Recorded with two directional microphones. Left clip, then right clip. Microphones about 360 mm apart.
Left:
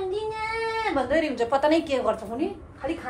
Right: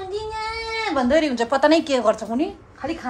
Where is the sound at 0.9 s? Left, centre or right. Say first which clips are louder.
Right 8 dB; right.